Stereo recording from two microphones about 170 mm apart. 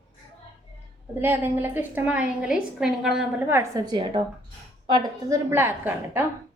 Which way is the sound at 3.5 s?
25° right (ahead or behind).